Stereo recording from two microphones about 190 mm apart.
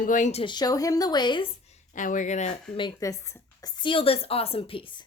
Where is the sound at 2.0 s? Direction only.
40° left (ahead or behind).